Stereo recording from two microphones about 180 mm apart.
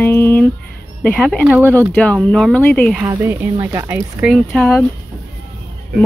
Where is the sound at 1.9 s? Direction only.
5° left (ahead or behind).